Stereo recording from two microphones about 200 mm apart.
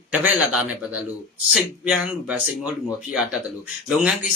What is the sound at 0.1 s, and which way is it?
A man's voice, 5° right (ahead or behind).